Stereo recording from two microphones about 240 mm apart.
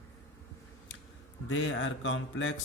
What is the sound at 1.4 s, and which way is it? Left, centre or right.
Speech, left.